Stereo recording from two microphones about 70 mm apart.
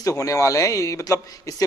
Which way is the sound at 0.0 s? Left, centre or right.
Left.